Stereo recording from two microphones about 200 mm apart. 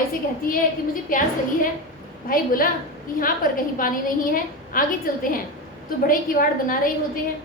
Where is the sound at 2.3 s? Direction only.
45° left (ahead or behind).